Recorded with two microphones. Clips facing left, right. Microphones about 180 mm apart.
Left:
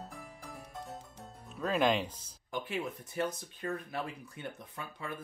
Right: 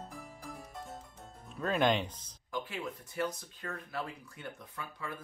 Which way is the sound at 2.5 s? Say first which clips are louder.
Left 2 dB; 25° left (ahead or behind).